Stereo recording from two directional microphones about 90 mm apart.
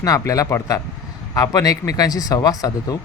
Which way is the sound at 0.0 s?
40° left (ahead or behind).